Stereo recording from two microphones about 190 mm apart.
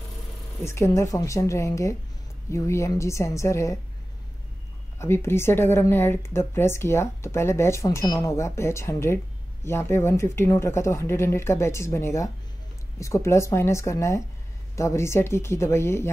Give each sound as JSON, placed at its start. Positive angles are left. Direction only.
{"t": 0.7, "sound": "speech", "side_deg": 15}
{"t": 4.9, "sound": "speech", "side_deg": 15}